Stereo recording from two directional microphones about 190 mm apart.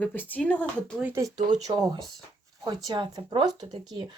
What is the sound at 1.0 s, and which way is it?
Speech, 10° right (ahead or behind).